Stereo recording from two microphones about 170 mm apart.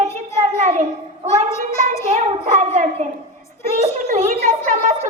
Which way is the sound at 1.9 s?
45° right (ahead or behind).